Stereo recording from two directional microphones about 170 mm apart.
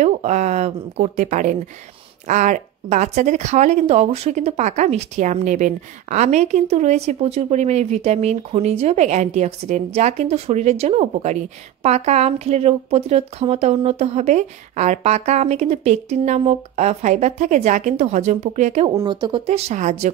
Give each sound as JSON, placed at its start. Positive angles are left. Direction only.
{"t": 0.0, "sound": "speech", "side_deg": -40}
{"t": 18.9, "sound": "speech", "side_deg": -25}
{"t": 19.4, "sound": "speech", "side_deg": -40}